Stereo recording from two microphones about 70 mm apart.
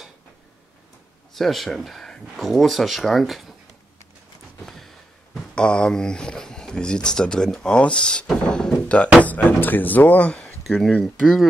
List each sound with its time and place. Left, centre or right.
1.3 s speech: centre
4.6 s speech: centre
10.8 s speech: centre